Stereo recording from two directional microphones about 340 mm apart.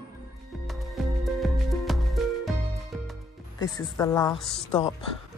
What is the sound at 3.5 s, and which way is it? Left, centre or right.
Speech, centre.